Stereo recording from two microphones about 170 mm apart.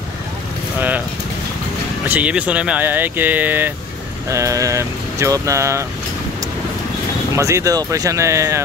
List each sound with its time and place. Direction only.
0.7 s vehicle: 10° right (ahead or behind)
2.0 s speech: 10° right (ahead or behind)
7.3 s speech: 15° right (ahead or behind)